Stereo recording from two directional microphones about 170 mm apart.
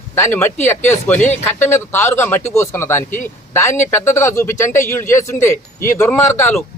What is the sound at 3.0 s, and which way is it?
Speech, 50° left (ahead or behind).